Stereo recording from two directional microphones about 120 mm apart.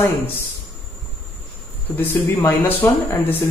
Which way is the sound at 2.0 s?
20° left (ahead or behind).